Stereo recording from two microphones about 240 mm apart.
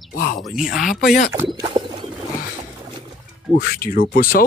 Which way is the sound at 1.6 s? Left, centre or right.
Centre.